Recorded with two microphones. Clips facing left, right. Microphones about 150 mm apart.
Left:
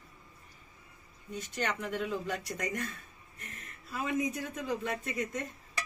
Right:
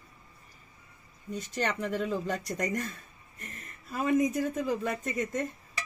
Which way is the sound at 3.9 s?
45° right (ahead or behind).